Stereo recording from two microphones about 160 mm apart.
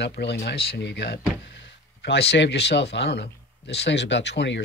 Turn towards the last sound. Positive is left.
turn(degrees=90)